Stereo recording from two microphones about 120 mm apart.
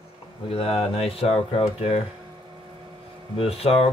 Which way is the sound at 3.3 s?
55° left (ahead or behind).